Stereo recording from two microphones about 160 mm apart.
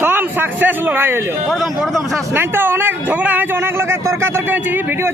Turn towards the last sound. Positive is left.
turn(degrees=-15)  # may be behind; listen again after turning